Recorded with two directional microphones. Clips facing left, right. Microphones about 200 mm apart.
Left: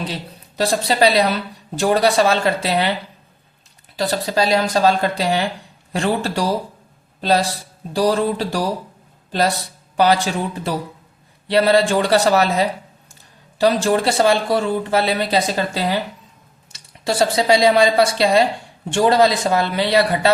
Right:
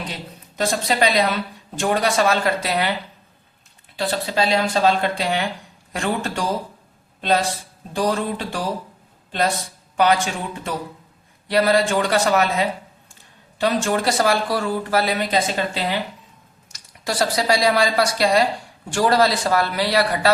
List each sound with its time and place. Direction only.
0.1 s a man's voice: 35° left (ahead or behind)
3.9 s speech: 40° left (ahead or behind)
10.0 s a man's voice: 35° left (ahead or behind)
17.0 s a man's voice: 25° left (ahead or behind)